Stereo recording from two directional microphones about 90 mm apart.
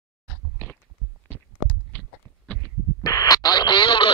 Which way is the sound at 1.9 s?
15° left (ahead or behind).